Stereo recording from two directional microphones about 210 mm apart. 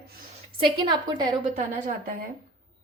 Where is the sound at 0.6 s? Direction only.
20° right (ahead or behind).